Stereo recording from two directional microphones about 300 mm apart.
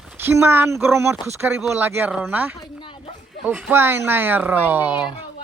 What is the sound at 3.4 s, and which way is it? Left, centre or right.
Speech, centre.